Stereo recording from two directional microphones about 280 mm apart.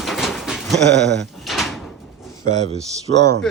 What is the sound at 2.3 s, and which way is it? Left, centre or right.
Speech, centre.